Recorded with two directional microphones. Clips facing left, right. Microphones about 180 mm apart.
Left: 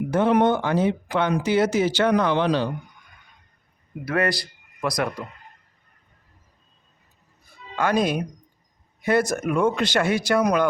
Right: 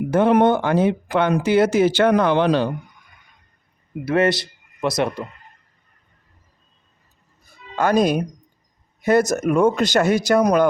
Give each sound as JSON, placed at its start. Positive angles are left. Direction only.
{"t": 0.1, "sound": "speech", "side_deg": -55}
{"t": 4.0, "sound": "speech", "side_deg": -25}
{"t": 7.8, "sound": "speech", "side_deg": -40}